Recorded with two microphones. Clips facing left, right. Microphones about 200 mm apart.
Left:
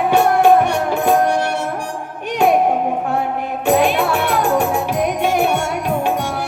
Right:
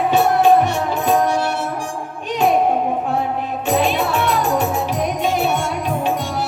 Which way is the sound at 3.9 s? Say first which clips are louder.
Left 1 dB; 55° left (ahead or behind).